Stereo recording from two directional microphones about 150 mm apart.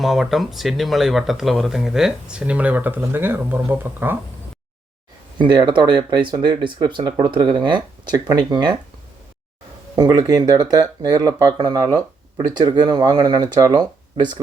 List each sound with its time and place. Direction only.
0.0 s speech: centre (ahead or behind)
5.4 s speech: 30° right (ahead or behind)
9.9 s speech: 25° right (ahead or behind)